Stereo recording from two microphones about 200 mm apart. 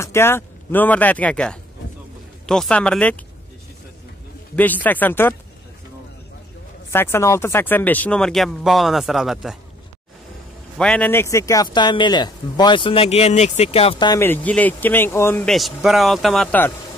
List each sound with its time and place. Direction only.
0.0 s speech: 15° left (ahead or behind)
4.6 s speech: 10° left (ahead or behind)
6.9 s speech: 10° left (ahead or behind)
10.8 s speech: 5° left (ahead or behind); by 14.2 s 20° left (ahead or behind)
14.2 s speech: 10° left (ahead or behind)